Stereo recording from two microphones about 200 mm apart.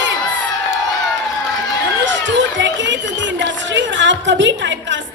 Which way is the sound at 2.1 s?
65° right (ahead or behind).